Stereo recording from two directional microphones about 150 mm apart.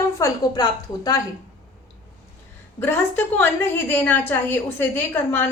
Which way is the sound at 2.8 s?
15° left (ahead or behind).